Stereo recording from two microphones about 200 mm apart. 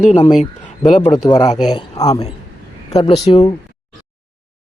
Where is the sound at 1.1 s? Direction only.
20° left (ahead or behind).